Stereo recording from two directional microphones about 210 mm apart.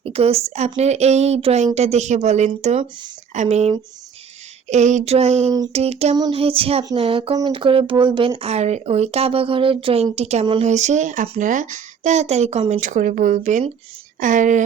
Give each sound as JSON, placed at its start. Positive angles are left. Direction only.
{"t": 0.0, "sound": "a woman's voice", "side_deg": -30}